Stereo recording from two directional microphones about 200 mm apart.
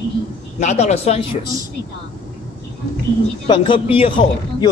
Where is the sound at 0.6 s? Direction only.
35° left (ahead or behind).